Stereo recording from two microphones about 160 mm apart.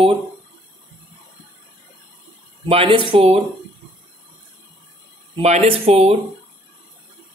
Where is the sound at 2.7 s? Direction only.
35° right (ahead or behind).